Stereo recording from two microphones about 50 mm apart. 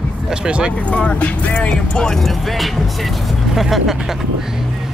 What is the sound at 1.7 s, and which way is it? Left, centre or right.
Speech, centre.